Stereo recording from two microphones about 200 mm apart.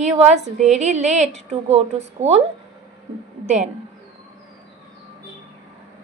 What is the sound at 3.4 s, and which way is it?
Speech, 35° right (ahead or behind).